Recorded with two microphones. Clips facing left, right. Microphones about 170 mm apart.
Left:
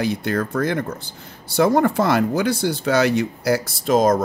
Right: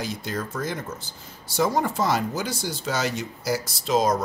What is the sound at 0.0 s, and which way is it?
Speech, 60° left (ahead or behind).